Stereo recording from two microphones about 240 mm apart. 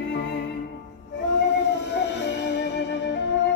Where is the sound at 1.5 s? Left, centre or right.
Left.